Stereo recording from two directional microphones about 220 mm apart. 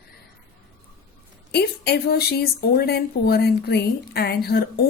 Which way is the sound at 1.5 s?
50° left (ahead or behind).